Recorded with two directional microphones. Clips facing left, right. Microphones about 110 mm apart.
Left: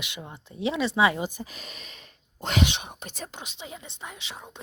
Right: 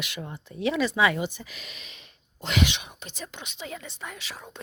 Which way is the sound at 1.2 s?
40° left (ahead or behind).